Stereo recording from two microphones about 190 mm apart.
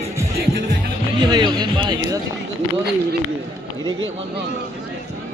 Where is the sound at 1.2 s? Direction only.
20° right (ahead or behind).